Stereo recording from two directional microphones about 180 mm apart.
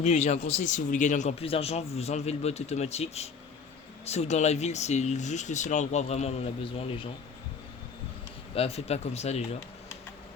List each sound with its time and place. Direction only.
0.0 s speech: 40° left (ahead or behind)
8.5 s speech: 35° left (ahead or behind)